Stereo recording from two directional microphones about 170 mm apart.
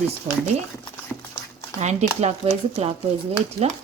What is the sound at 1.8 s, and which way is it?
Speech, 40° right (ahead or behind).